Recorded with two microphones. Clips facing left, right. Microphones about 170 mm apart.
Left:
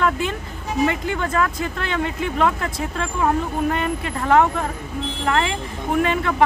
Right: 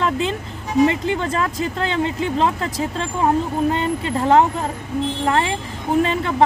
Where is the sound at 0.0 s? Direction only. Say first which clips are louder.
Right 1 dB; 25° right (ahead or behind).